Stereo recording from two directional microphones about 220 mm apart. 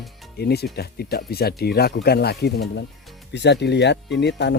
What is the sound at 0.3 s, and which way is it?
Speech, 45° left (ahead or behind).